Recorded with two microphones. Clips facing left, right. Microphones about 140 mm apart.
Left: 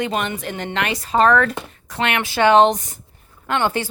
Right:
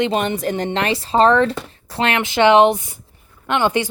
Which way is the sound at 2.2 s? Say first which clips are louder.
Right 1 dB; 20° right (ahead or behind).